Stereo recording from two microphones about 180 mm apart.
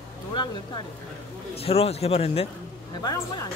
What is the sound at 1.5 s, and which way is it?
Speech, 35° left (ahead or behind).